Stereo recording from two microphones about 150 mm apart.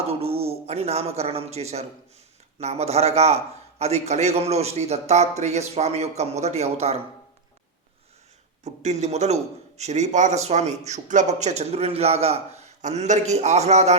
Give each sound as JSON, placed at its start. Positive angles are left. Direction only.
{"t": 0.1, "sound": "a man's voice", "side_deg": -40}
{"t": 8.6, "sound": "a man's voice", "side_deg": -50}